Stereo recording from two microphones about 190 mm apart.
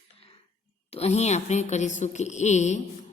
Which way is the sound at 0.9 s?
35° left (ahead or behind).